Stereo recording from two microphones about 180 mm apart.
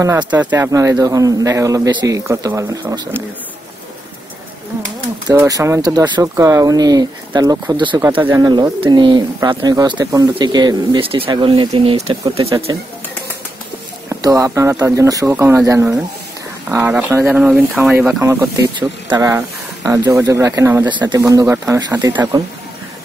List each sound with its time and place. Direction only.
0.0 s a man's voice: 15° right (ahead or behind)
5.3 s speech: 15° right (ahead or behind)
8.2 s a man's voice: 10° right (ahead or behind)
8.5 s speech: 25° right (ahead or behind)
14.0 s a man's voice: 15° right (ahead or behind)